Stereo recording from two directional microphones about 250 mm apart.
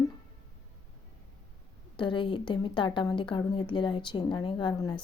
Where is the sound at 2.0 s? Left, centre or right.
Centre.